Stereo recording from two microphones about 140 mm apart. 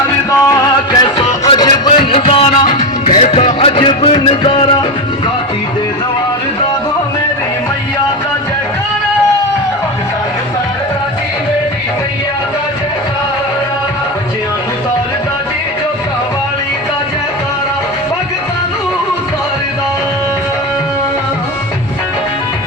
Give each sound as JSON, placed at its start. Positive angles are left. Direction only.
{"t": 0.3, "sound": "music", "side_deg": 20}